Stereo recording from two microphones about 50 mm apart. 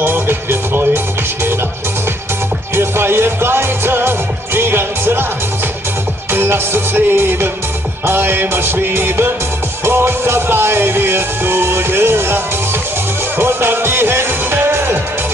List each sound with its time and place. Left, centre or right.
0.0 s music: right
2.7 s music: right
6.3 s music: right
13.4 s music: right